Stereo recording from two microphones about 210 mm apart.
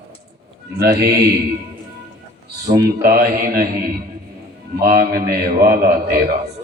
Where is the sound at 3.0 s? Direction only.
45° right (ahead or behind).